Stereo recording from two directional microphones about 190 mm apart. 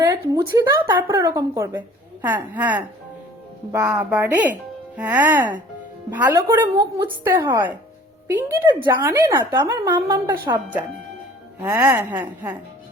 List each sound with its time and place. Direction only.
0.0 s a woman's voice: 20° right (ahead or behind)